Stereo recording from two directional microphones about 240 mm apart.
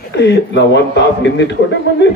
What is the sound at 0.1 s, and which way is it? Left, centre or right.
Speech, left.